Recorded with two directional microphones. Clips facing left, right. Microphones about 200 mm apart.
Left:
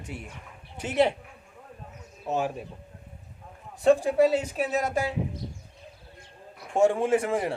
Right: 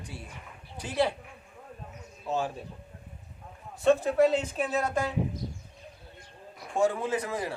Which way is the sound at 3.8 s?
10° left (ahead or behind).